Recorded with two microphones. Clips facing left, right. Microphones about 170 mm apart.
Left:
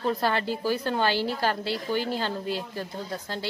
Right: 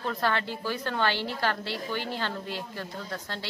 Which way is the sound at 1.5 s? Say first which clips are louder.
Left 4 dB; 35° left (ahead or behind).